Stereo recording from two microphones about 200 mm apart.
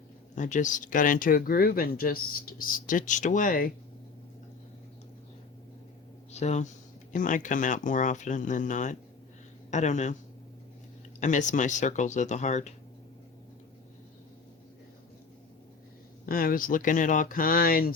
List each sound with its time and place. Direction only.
0.3 s speech: 40° left (ahead or behind)
6.3 s speech: 35° left (ahead or behind)
11.2 s speech: 40° left (ahead or behind)
16.2 s speech: 45° left (ahead or behind)